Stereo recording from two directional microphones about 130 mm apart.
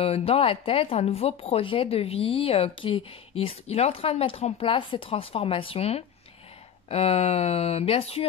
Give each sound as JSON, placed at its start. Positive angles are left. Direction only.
{"t": 0.0, "sound": "speech", "side_deg": 50}